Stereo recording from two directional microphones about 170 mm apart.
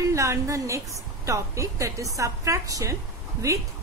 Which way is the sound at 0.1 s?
20° right (ahead or behind).